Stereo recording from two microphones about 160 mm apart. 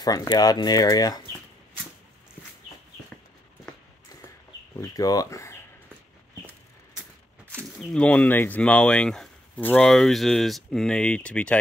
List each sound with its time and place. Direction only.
0.0 s speech: 25° left (ahead or behind)
4.7 s speech: 25° left (ahead or behind)
7.8 s speech: 5° left (ahead or behind)